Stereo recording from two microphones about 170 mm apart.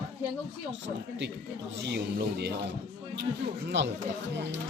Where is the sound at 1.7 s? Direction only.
85° right.